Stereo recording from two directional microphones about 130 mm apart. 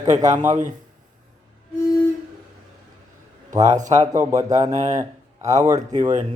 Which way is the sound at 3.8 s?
70° right (ahead or behind).